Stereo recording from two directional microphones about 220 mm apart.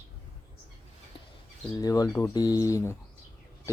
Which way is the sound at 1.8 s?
15° left (ahead or behind).